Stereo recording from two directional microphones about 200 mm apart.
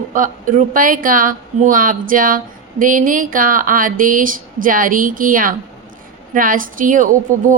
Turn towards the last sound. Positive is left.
turn(degrees=-40)  # may be behind; listen again after turning